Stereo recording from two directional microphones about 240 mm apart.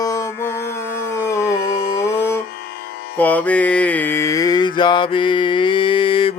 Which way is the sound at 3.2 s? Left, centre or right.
Centre.